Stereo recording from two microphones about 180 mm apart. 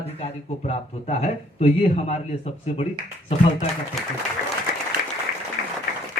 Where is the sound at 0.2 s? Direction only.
40° left (ahead or behind).